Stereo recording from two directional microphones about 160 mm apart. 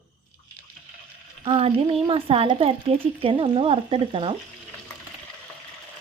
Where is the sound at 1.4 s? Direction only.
35° right (ahead or behind).